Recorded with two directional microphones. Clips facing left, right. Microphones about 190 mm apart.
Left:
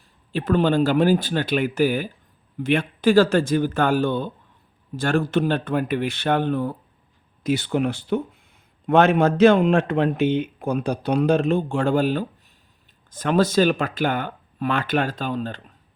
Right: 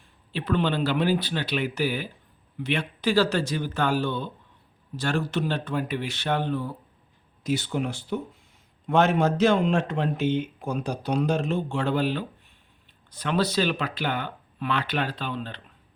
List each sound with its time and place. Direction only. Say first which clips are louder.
0.3 s speech: left 6 dB; 45° left (ahead or behind)